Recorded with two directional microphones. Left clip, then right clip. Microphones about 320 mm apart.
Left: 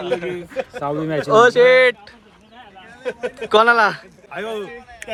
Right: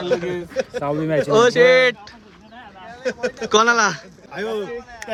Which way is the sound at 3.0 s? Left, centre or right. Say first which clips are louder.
Right 2 dB; centre.